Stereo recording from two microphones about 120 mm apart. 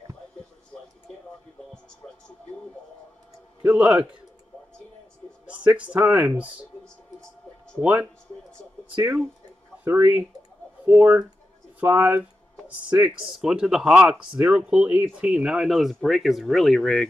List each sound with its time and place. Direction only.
3.6 s speech: 15° right (ahead or behind)
5.8 s speech: 10° right (ahead or behind)
7.8 s speech: 15° right (ahead or behind)
9.8 s speech: 20° right (ahead or behind); by 17.1 s 5° left (ahead or behind)